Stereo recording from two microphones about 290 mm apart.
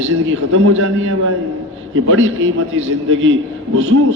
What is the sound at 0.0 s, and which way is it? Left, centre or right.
A man's voice, right.